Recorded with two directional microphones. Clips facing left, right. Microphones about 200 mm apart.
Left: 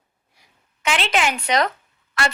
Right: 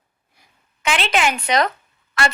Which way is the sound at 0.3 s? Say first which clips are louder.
Right 1 dB; 60° right (ahead or behind).